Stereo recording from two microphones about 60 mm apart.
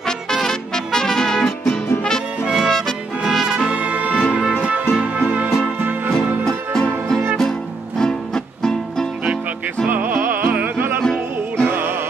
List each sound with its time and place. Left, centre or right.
0.3 s music: centre
3.7 s music: right
6.4 s music: centre
9.8 s music: right